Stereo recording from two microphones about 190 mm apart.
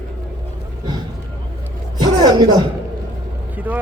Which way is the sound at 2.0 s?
20° right (ahead or behind).